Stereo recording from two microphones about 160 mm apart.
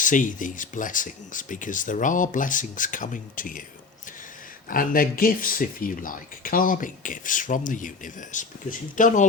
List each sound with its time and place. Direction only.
0.0 s speech: 55° left (ahead or behind)
4.7 s speech: 60° left (ahead or behind)